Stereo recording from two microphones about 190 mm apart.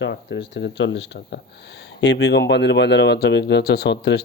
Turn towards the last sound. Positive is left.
turn(degrees=60)  # may be behind; listen again after turning